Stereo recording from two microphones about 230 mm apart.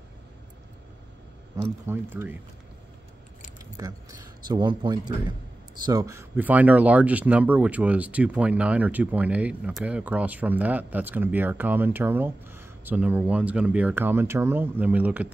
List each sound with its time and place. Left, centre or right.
1.6 s speech: centre
3.8 s a man's voice: centre